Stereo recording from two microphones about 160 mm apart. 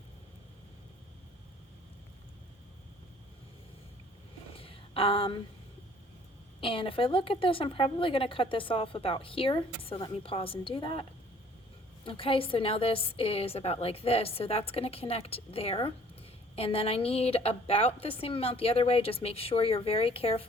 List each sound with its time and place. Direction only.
4.5 s a sound: 35° left (ahead or behind)
6.6 s a woman's voice: 35° left (ahead or behind)
12.0 s a woman's voice: 35° left (ahead or behind)